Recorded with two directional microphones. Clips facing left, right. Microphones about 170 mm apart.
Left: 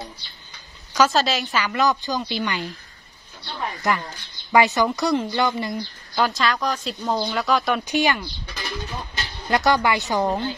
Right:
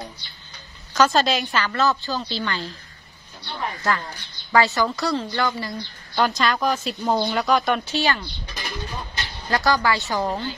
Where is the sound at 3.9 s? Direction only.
20° left (ahead or behind).